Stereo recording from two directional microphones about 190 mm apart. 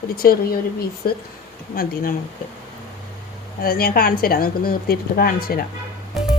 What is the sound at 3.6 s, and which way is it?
A woman's voice, 50° left (ahead or behind).